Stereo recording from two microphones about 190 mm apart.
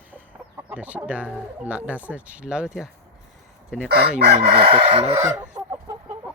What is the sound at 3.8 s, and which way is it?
Chicken, 55° right (ahead or behind).